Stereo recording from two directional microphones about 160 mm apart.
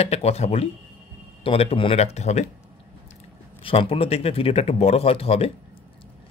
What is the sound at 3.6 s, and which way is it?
Speech, 35° left (ahead or behind).